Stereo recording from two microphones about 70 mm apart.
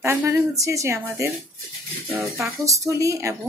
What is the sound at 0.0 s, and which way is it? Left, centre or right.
Speech, right.